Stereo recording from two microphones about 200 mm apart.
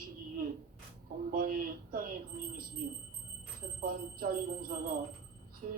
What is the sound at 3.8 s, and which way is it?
Speech, 45° right (ahead or behind).